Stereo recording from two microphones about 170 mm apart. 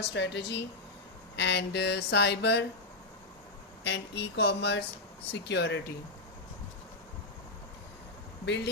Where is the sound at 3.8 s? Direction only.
90° left.